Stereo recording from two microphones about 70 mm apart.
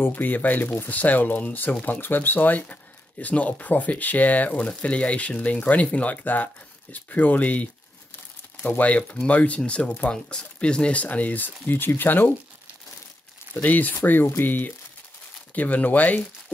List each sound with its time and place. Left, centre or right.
0.0 s speech: left
8.6 s speech: left
13.6 s speech: left